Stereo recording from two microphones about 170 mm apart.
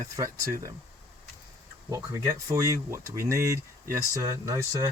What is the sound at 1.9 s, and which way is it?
Speech, 20° right (ahead or behind).